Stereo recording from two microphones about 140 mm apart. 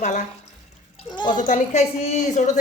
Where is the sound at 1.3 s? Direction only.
65° left (ahead or behind).